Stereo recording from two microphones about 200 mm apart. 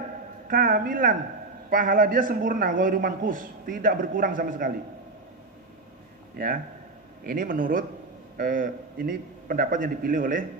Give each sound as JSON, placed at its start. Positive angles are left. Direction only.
{"t": 0.5, "sound": "a man's voice", "side_deg": -45}
{"t": 6.3, "sound": "a man's voice", "side_deg": -45}